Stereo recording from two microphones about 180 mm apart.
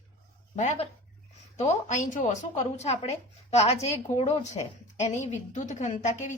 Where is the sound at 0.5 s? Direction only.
40° left (ahead or behind).